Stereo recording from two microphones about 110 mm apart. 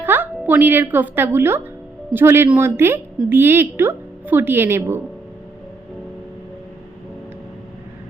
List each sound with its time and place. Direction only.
0.0 s a woman's voice: 20° right (ahead or behind)